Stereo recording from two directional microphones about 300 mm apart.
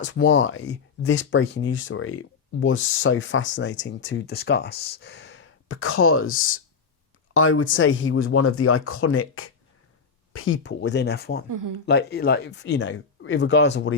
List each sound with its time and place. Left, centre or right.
0.0 s speech: left
11.4 s speech: right
11.9 s speech: left